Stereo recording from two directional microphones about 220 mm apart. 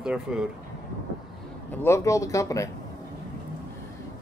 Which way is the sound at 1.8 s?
10° left (ahead or behind).